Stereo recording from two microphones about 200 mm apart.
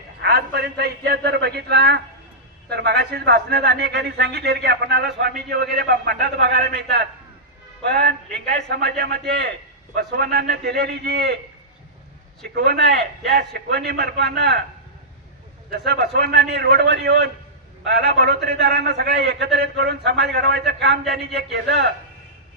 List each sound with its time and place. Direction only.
0.2 s a man's voice: 55° right (ahead or behind)
12.5 s a man's voice: 55° right (ahead or behind)
15.7 s a man's voice: 55° right (ahead or behind)